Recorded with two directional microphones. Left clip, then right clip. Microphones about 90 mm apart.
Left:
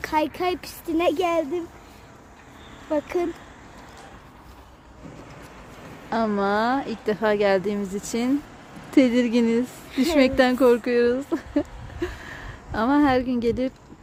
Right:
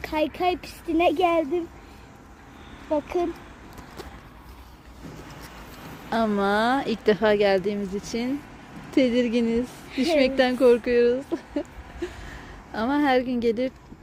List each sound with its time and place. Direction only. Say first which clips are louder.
0.0 s a child's voice: left 1 dB; 45° left (ahead or behind)
2.9 s speech: even; 55° left (ahead or behind)
6.1 s speech: even; 15° left (ahead or behind)
6.8 s a woman's voice: right 4 dB; 20° right (ahead or behind)
7.3 s speech: even; 25° left (ahead or behind)
7.6 s a woman's voice: even; 50° left (ahead or behind)